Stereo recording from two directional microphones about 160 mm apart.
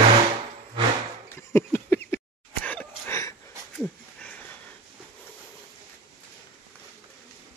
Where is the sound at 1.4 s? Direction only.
15° left (ahead or behind).